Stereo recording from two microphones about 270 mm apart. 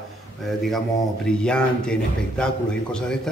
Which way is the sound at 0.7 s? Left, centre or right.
Centre.